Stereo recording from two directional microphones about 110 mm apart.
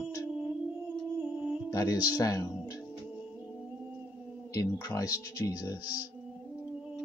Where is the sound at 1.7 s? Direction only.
30° left (ahead or behind).